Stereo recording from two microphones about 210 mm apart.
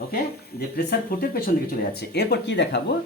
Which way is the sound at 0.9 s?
45° left (ahead or behind).